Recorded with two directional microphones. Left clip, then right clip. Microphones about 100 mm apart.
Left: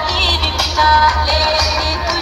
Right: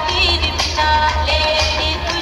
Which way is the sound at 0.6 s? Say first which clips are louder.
Left 6 dB; 15° left (ahead or behind).